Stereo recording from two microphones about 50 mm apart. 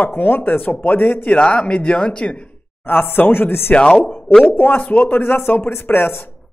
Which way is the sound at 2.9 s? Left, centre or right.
Left.